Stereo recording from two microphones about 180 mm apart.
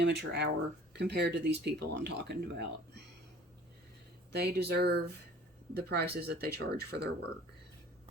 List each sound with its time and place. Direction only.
0.0 s speech: 70° right (ahead or behind)
4.3 s speech: 65° right (ahead or behind)